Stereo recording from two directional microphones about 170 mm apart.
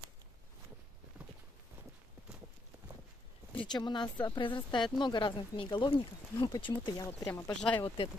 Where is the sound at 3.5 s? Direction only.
30° left (ahead or behind).